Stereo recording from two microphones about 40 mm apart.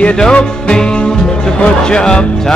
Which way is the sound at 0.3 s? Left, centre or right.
Left.